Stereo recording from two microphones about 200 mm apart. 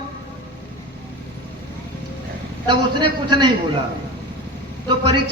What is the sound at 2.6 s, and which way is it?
Speech, 25° right (ahead or behind).